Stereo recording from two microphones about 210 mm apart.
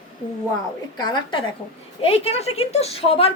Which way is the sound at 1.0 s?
20° left (ahead or behind).